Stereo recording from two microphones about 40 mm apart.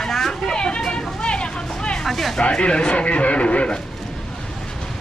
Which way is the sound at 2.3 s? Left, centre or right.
Left.